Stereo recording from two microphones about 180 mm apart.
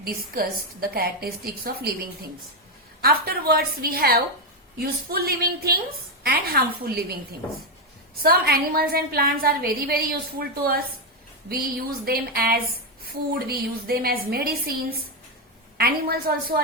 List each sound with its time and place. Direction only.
0.0 s a woman's voice: 55° right (ahead or behind)
3.0 s a woman's voice: 55° right (ahead or behind)
8.2 s a woman's voice: 55° right (ahead or behind)
12.0 s a woman's voice: 60° right (ahead or behind)